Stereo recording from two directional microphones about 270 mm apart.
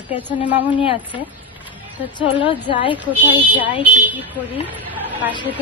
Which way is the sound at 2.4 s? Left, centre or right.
Centre.